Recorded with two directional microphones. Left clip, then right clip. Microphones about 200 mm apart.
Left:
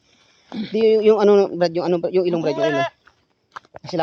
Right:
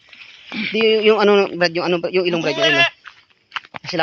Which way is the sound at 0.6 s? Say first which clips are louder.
Right 1 dB; 25° left (ahead or behind).